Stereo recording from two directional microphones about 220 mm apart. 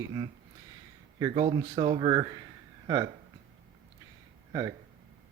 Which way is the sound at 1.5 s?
20° right (ahead or behind).